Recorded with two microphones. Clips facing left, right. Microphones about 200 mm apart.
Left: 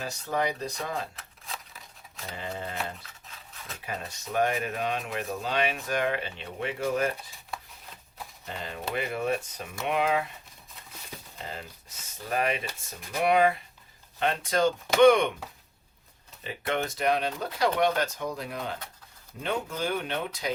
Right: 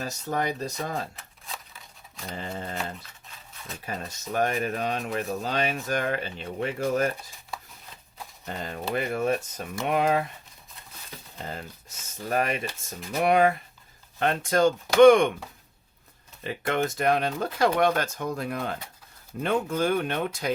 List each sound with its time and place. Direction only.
0.0 s speech: 40° right (ahead or behind)
1.5 s scissors: centre (ahead or behind)
3.2 s dog: centre (ahead or behind)
3.8 s speech: 45° right (ahead or behind)
8.4 s speech: 45° right (ahead or behind)
12.3 s speech: 45° right (ahead or behind)
16.4 s speech: 50° right (ahead or behind)